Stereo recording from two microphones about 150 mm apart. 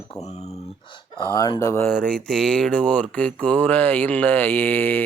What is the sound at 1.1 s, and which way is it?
Speech, 25° left (ahead or behind).